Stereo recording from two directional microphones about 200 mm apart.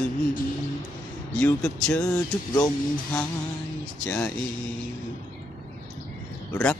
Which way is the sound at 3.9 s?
10° left (ahead or behind).